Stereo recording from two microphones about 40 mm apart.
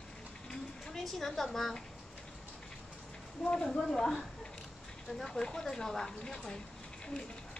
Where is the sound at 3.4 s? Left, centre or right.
Centre.